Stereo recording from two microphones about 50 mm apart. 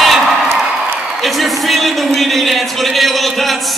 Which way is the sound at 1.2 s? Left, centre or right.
Centre.